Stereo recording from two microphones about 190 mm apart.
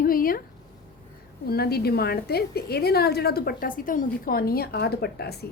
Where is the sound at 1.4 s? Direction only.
55° left (ahead or behind).